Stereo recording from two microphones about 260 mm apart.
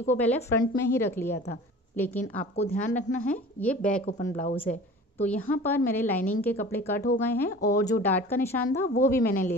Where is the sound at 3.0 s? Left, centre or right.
Left.